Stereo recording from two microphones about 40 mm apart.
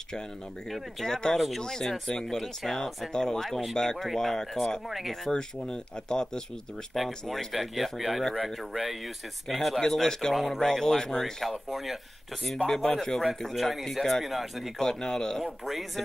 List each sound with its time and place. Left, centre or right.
0.7 s speech: centre
3.1 s speech: centre
3.4 s speech: centre
4.8 s speech: centre
5.3 s speech: centre
6.9 s speech: centre
9.5 s speech: centre
11.7 s speech: centre
12.6 s speech: centre
13.6 s speech: centre
14.8 s speech: centre